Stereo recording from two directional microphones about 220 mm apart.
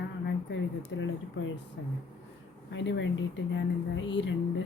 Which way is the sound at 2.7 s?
55° left (ahead or behind).